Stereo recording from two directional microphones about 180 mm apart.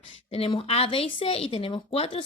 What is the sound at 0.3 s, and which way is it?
A woman's voice, 35° left (ahead or behind).